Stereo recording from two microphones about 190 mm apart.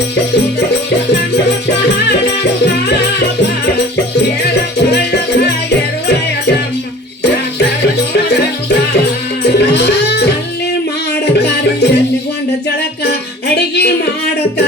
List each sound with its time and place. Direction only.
4.9 s music: 60° left (ahead or behind)
9.4 s music: 60° left (ahead or behind)
11.3 s music: 60° left (ahead or behind)
13.6 s music: 60° left (ahead or behind)